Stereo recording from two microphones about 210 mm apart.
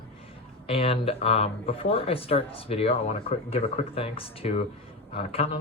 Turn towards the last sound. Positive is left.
turn(degrees=25)  # may be behind; listen again after turning